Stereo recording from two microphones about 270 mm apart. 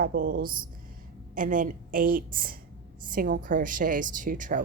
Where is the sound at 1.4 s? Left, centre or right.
Right.